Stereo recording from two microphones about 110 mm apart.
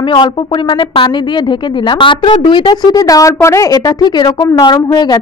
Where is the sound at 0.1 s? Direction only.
45° left (ahead or behind).